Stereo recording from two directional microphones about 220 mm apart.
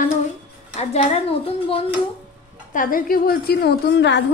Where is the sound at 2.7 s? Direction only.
40° left (ahead or behind).